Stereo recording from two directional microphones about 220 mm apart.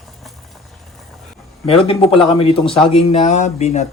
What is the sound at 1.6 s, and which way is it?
Speech, 25° left (ahead or behind).